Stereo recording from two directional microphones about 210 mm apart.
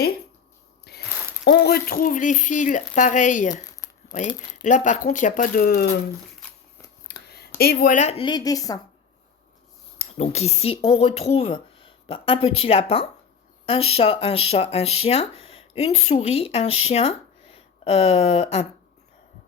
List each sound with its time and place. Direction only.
0.9 s a sound: 50° left (ahead or behind)
1.5 s speech: 50° left (ahead or behind)
4.6 s speech: 35° left (ahead or behind)
7.1 s a sound: 50° left (ahead or behind)
7.6 s speech: 45° left (ahead or behind); by 8.8 s 15° left (ahead or behind)
10.0 s speech: 30° left (ahead or behind)